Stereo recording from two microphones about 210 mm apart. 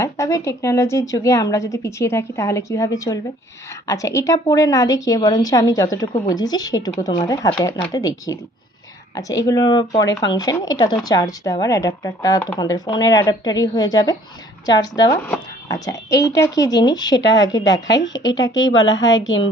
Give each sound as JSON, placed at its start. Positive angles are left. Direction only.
{"t": 0.0, "sound": "a woman's voice", "side_deg": 15}
{"t": 17.8, "sound": "a woman's voice", "side_deg": 60}